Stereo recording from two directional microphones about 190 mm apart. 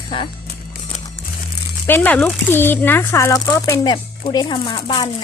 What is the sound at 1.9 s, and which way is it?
Speech, 10° left (ahead or behind).